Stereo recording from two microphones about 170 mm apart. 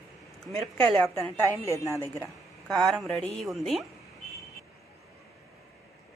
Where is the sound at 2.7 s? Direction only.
Centre (ahead or behind).